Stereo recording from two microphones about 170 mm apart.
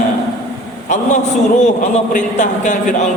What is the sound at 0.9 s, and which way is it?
A man's voice, 45° left (ahead or behind).